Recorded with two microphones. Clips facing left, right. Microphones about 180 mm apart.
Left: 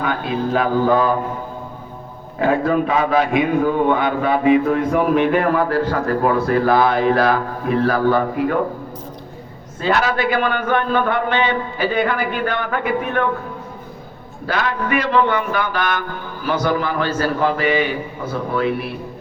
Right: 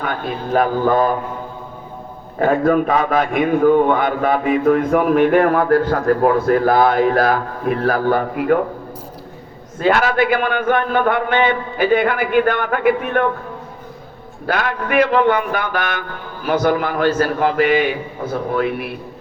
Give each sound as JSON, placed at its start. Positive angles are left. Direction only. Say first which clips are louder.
{"t": 0.0, "sound": "speech", "louder": "left 3 dB", "side_deg": -45}
{"t": 2.4, "sound": "a man's voice", "louder": "right 2 dB", "side_deg": -45}
{"t": 9.8, "sound": "a man's voice", "louder": "right 3 dB", "side_deg": -50}
{"t": 14.4, "sound": "a man's voice", "louder": "right 1 dB", "side_deg": -50}